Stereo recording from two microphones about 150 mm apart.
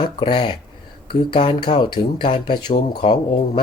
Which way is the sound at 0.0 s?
35° left (ahead or behind).